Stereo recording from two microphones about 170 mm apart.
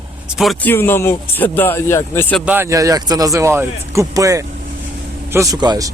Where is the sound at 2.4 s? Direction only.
10° right (ahead or behind).